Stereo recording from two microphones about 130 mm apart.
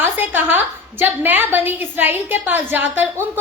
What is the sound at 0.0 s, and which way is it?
A woman's voice, 15° right (ahead or behind).